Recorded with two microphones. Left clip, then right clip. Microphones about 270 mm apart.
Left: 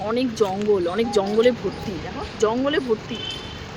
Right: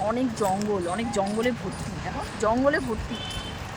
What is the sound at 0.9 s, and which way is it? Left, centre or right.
Speech, centre.